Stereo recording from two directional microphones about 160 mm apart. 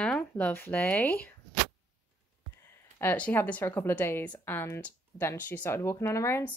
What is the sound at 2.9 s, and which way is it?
A woman's voice, 10° left (ahead or behind).